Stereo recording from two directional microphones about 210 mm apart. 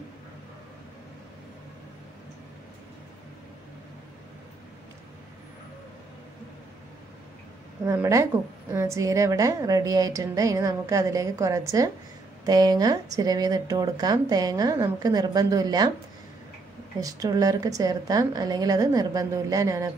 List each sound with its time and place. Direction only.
7.8 s speech: 15° right (ahead or behind)
17.0 s speech: 15° right (ahead or behind)